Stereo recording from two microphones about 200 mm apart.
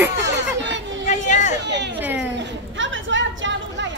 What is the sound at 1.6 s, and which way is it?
Speech, 60° right (ahead or behind).